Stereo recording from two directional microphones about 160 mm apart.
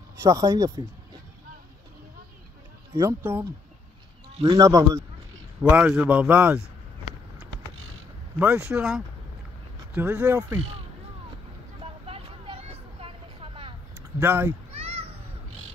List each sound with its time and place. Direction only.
0.2 s speech: 20° right (ahead or behind)
2.9 s speech: 20° right (ahead or behind)
4.6 s speech: 20° right (ahead or behind)
5.6 s a man's voice: 10° right (ahead or behind)
8.4 s a man's voice: 10° right (ahead or behind)
11.8 s vehicle: 35° right (ahead or behind)
14.2 s a man's voice: 10° right (ahead or behind)
14.7 s a sound: 35° right (ahead or behind)